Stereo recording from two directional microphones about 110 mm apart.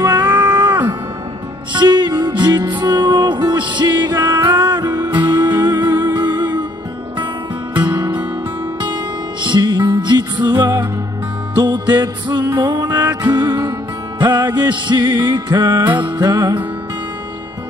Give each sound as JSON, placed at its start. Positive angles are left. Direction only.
{"t": 0.0, "sound": "a sound", "side_deg": -35}
{"t": 0.4, "sound": "music", "side_deg": -40}
{"t": 7.8, "sound": "music", "side_deg": -40}
{"t": 9.4, "sound": "music", "side_deg": -40}